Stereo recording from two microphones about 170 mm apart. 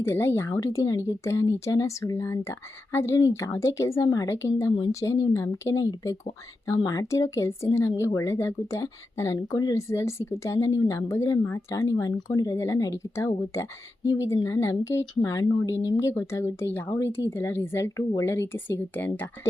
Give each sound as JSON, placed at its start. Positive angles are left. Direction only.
{"t": 0.0, "sound": "speech", "side_deg": 15}